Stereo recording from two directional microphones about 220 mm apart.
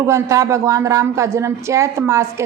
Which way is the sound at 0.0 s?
15° right (ahead or behind).